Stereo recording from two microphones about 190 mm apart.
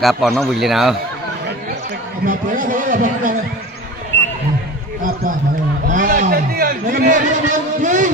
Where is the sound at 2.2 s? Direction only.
45° right (ahead or behind).